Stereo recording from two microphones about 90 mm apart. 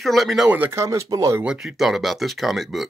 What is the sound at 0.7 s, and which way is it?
Speech, 35° right (ahead or behind).